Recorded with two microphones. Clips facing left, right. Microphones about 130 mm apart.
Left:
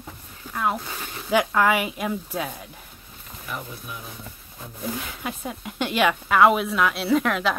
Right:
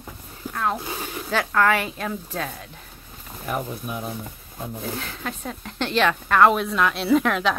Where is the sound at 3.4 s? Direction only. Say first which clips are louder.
Right 7 dB; 50° right (ahead or behind).